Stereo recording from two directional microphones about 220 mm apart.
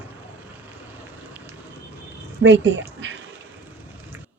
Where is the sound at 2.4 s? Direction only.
60° right (ahead or behind).